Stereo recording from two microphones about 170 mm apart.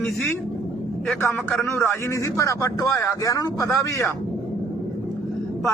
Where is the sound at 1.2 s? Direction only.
10° left (ahead or behind).